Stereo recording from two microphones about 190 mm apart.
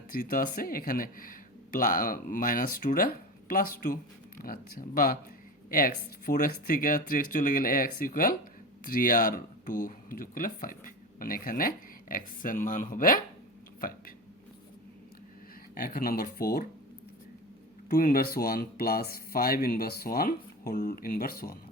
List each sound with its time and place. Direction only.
0.1 s speech: 45° left (ahead or behind)
15.7 s speech: 50° left (ahead or behind)
17.8 s speech: 50° left (ahead or behind)